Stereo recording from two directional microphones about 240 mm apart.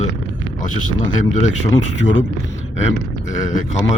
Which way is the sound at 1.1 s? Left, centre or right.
Left.